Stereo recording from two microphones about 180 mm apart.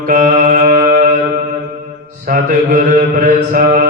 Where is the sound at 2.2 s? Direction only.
45° right (ahead or behind).